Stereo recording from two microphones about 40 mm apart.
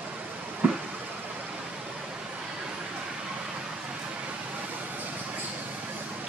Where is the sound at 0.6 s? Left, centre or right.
Right.